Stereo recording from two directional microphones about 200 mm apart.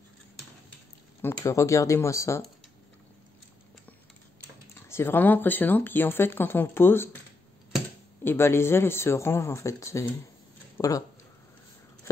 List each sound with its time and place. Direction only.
1.2 s speech: 15° left (ahead or behind)
4.7 s speech: 15° left (ahead or behind)
8.2 s speech: 10° left (ahead or behind)